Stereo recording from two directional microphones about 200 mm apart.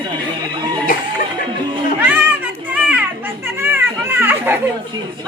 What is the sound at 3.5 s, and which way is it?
Children playing, 10° right (ahead or behind).